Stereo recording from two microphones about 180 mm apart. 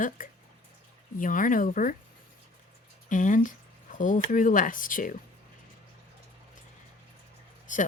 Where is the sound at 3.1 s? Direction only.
45° left (ahead or behind).